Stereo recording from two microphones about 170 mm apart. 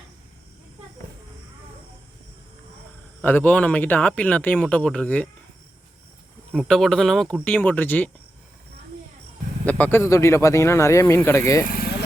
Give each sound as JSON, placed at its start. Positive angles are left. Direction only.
{"t": 3.2, "sound": "speech", "side_deg": 10}
{"t": 6.5, "sound": "speech", "side_deg": 5}
{"t": 9.6, "sound": "speech", "side_deg": 10}